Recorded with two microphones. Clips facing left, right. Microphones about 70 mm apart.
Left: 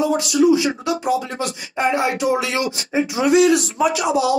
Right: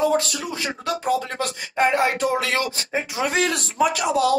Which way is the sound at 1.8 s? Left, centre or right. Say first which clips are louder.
Even; right.